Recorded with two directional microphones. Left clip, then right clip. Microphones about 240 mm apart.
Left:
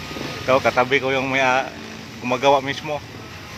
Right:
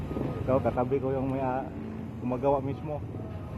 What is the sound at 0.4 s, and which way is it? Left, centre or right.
Speech, left.